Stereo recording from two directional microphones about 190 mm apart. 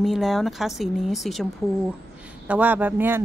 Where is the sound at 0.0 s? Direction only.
Centre (ahead or behind).